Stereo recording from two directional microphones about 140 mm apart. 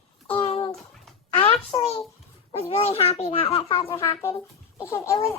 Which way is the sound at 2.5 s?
45° left (ahead or behind).